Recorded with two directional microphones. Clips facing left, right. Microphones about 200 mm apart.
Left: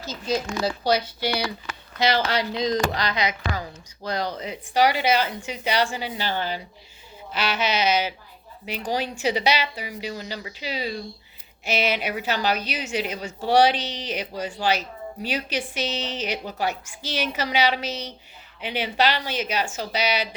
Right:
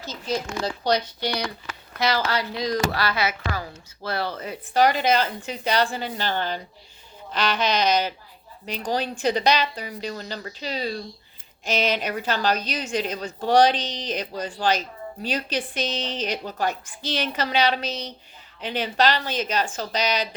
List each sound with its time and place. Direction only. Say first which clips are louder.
0.0 s a woman's voice: left 2 dB; 10° left (ahead or behind)
2.0 s a woman's voice: left 1 dB; 20° left (ahead or behind)